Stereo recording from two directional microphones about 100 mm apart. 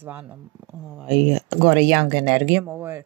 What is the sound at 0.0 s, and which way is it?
Speech, 20° right (ahead or behind).